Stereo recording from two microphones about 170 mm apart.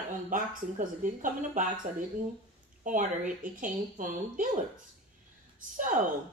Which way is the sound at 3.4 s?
50° right (ahead or behind).